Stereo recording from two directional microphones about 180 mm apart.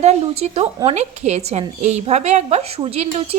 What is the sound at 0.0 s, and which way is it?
A woman's voice, 35° right (ahead or behind).